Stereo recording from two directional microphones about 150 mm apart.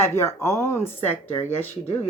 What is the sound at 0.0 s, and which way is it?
Speech, 15° left (ahead or behind).